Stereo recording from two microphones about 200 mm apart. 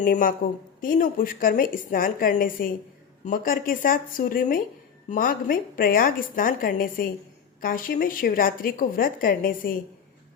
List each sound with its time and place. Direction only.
0.0 s a woman's voice: 40° left (ahead or behind)